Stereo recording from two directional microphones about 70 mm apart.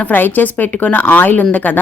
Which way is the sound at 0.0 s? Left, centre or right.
Left.